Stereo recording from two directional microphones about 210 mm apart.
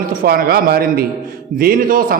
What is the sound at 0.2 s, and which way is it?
A man's voice, 45° right (ahead or behind).